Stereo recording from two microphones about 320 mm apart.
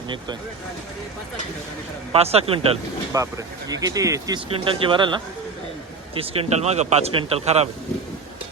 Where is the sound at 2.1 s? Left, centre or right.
Centre.